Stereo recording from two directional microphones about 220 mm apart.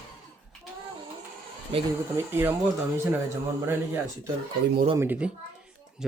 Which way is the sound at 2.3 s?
10° right (ahead or behind).